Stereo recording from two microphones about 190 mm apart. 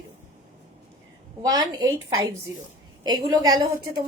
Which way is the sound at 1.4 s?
20° right (ahead or behind).